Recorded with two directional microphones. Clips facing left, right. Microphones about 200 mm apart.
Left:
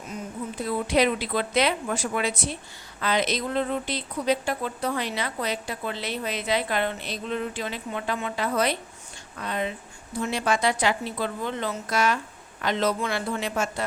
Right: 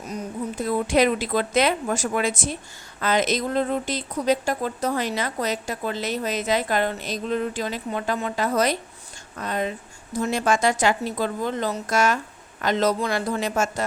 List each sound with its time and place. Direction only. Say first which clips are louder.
0.1 s speech: right 4 dB; 45° right (ahead or behind)